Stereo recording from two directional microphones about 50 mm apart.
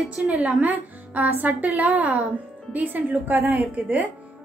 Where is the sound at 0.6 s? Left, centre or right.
Right.